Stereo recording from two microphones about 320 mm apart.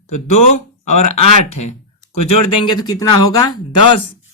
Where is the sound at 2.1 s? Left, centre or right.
Left.